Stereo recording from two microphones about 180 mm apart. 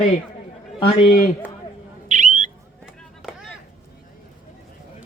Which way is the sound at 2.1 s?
40° right (ahead or behind).